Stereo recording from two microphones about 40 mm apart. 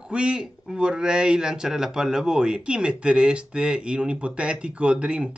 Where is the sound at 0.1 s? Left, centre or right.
Right.